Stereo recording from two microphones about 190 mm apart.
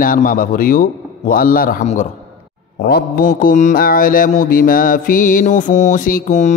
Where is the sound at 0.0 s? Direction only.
45° left (ahead or behind).